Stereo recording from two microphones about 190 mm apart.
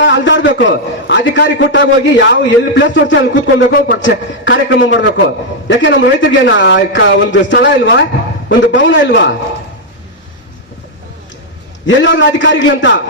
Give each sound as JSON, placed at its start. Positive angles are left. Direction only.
{"t": 0.1, "sound": "a man's voice", "side_deg": 70}
{"t": 11.9, "sound": "a man's voice", "side_deg": 75}